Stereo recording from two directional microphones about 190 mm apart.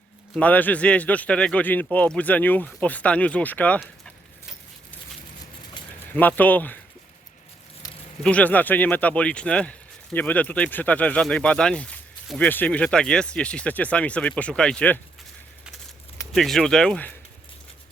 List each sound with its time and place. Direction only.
0.3 s speech: 10° left (ahead or behind)
5.8 s a sound: 25° left (ahead or behind)
6.1 s speech: 10° left (ahead or behind)
8.2 s speech: 5° left (ahead or behind)
16.3 s speech: centre (ahead or behind)